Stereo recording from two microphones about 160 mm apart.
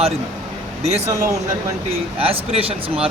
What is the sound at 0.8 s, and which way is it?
Speech, 40° right (ahead or behind).